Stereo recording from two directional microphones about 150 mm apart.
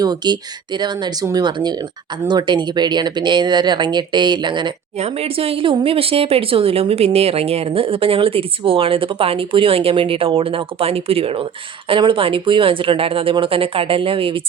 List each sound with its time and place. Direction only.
0.0 s speech: 30° right (ahead or behind)
4.9 s speech: 45° right (ahead or behind)